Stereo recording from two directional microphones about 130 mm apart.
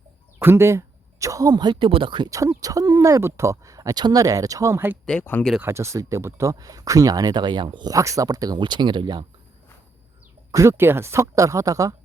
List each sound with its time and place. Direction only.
0.3 s speech: 20° right (ahead or behind); by 2.3 s 40° right (ahead or behind)
2.6 s speech: 25° right (ahead or behind)
5.0 s speech: 10° left (ahead or behind)
5.5 s speech: 20° right (ahead or behind); by 9.2 s 35° right (ahead or behind)
10.5 s speech: 20° right (ahead or behind)